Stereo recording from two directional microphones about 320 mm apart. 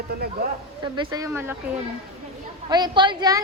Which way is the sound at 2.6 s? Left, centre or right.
Centre.